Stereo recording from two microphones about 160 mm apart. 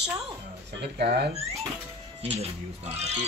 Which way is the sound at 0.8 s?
90° right.